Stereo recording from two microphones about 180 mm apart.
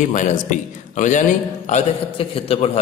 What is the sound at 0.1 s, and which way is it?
A man's voice, 40° left (ahead or behind).